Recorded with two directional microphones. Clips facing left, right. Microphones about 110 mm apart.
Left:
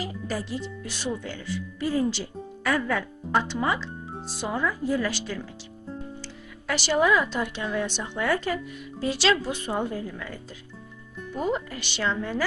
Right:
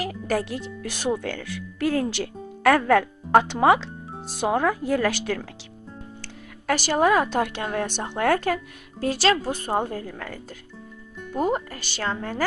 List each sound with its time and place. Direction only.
0.0 s speech: 65° right (ahead or behind)
6.2 s speech: 45° right (ahead or behind)
11.4 s speech: 45° right (ahead or behind)